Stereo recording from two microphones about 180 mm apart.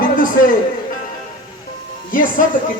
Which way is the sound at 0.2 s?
50° left (ahead or behind).